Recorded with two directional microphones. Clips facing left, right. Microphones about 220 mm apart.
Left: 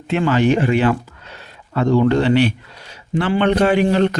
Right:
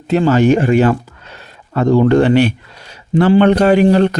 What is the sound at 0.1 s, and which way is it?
Speech, 40° right (ahead or behind).